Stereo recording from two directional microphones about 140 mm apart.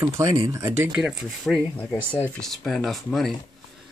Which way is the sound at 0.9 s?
5° right (ahead or behind).